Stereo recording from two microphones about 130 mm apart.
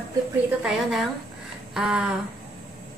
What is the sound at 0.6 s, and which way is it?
A woman's voice, centre (ahead or behind).